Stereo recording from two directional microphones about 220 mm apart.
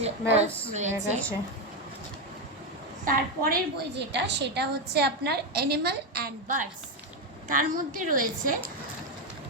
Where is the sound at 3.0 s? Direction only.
40° right (ahead or behind).